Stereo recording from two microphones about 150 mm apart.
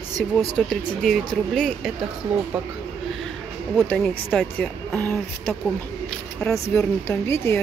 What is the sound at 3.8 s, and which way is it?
Speech, 10° left (ahead or behind).